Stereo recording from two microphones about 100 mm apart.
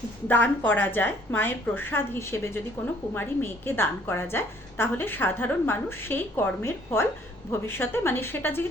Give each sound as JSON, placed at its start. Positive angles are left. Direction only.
{"t": 0.3, "sound": "a woman's voice", "side_deg": 15}